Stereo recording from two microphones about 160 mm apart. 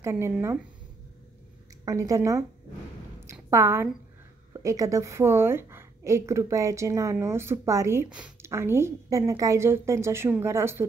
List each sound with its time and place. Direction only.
0.0 s a woman's voice: 15° right (ahead or behind)
1.9 s speech: 20° right (ahead or behind)
3.2 s a sound: 15° right (ahead or behind)
4.6 s a woman's voice: 20° right (ahead or behind)